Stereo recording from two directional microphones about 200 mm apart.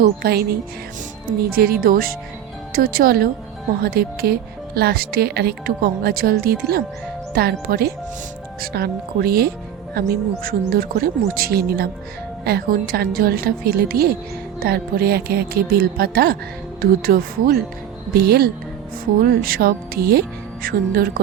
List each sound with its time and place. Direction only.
0.0 s speech: 50° right (ahead or behind)
1.5 s speech: 50° right (ahead or behind)